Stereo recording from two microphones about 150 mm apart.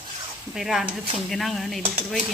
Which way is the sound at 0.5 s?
Centre (ahead or behind).